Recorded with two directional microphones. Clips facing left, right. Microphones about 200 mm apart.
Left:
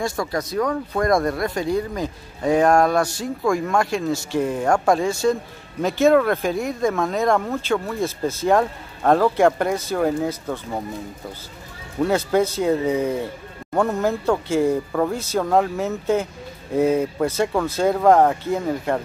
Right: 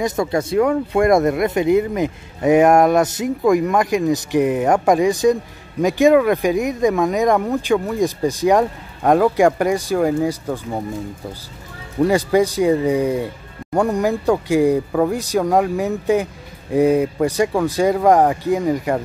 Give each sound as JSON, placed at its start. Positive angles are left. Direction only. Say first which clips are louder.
{"t": 0.0, "sound": "speech", "louder": "right 5 dB", "side_deg": -20}
{"t": 12.0, "sound": "speech", "louder": "right 4 dB", "side_deg": -15}